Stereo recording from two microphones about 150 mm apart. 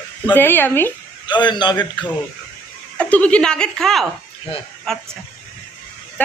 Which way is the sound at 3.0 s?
10° left (ahead or behind).